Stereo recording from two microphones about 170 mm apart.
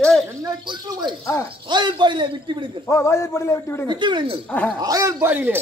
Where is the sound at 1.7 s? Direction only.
25° right (ahead or behind).